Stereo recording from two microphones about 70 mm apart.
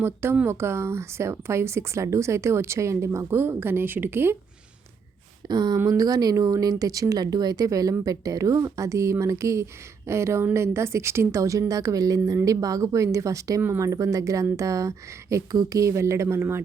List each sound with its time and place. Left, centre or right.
0.0 s speech: right
5.5 s speech: right
5.7 s speech: right